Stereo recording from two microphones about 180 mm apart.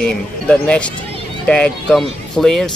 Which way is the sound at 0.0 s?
5° left (ahead or behind).